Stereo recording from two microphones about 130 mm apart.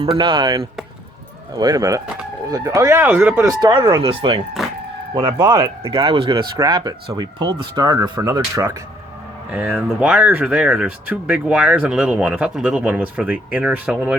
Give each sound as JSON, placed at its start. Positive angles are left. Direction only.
{"t": 0.1, "sound": "speech", "side_deg": -35}
{"t": 3.8, "sound": "speech", "side_deg": -35}
{"t": 5.4, "sound": "speech", "side_deg": -30}